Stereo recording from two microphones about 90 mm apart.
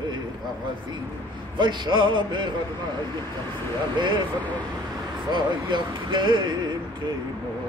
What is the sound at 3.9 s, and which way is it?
Speech, 60° right (ahead or behind).